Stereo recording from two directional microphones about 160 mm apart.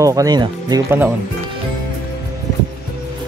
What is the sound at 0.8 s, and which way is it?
Speech, 15° right (ahead or behind).